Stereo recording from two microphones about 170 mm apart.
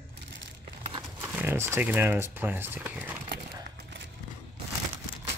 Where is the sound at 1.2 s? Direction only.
15° right (ahead or behind).